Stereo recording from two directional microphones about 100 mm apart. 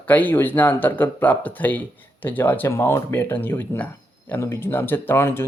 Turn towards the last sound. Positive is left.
turn(degrees=25)  # may be behind; listen again after turning